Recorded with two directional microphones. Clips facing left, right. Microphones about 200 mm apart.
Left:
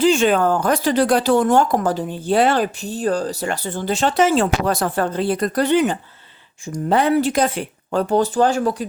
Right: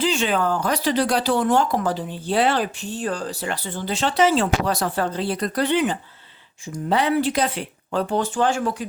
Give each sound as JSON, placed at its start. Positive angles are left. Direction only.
{"t": 0.0, "sound": "speech", "side_deg": 50}